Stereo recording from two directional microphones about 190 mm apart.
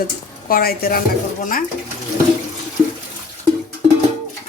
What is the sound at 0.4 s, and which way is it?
Speech, 50° left (ahead or behind).